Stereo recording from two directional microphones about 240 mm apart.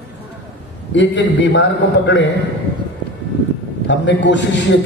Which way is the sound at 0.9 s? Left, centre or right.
Left.